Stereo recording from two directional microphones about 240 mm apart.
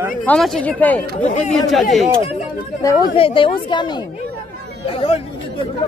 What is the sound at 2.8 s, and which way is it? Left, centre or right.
Speech, left.